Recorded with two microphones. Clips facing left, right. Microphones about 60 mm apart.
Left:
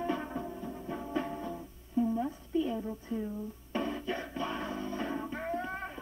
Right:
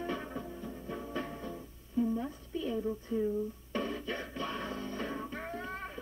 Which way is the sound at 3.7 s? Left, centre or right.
Centre.